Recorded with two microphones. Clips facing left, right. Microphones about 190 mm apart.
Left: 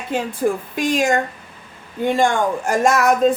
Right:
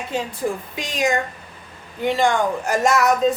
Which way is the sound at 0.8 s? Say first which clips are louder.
Left 4 dB; 50° left (ahead or behind).